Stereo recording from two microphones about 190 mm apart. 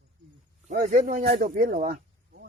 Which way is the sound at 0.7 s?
45° right (ahead or behind).